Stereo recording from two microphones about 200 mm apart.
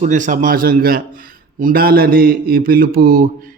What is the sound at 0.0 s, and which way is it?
Mantra, 40° right (ahead or behind).